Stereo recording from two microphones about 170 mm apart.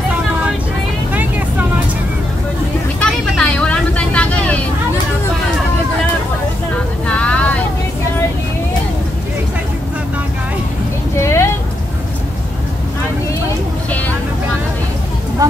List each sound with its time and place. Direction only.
3.0 s vehicle: 5° left (ahead or behind)
7.2 s vehicle: 5° left (ahead or behind)
11.1 s a sound: 15° left (ahead or behind)
13.8 s vehicle: 10° left (ahead or behind)